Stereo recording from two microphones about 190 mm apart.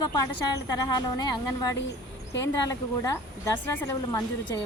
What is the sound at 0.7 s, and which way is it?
Speech, 20° left (ahead or behind).